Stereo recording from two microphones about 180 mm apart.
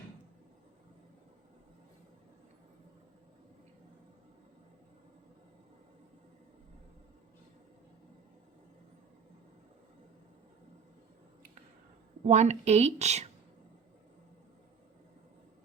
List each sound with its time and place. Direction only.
12.2 s a woman's voice: 40° right (ahead or behind)